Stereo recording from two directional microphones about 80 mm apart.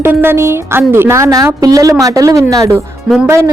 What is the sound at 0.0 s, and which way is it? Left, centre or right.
A woman's voice, right.